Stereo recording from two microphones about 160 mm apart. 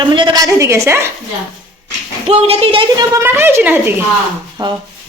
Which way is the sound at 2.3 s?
40° right (ahead or behind).